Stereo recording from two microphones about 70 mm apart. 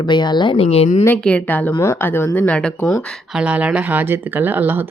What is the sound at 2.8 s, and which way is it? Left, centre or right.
Speech, left.